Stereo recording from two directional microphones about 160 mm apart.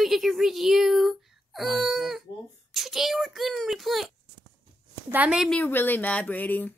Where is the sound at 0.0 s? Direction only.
Centre (ahead or behind).